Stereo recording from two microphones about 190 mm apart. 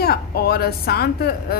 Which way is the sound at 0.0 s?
55° left (ahead or behind).